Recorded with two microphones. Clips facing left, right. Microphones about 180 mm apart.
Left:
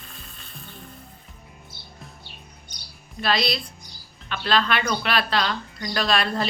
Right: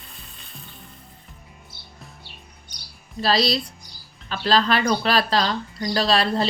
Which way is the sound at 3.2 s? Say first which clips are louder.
Right 3 dB; 35° right (ahead or behind).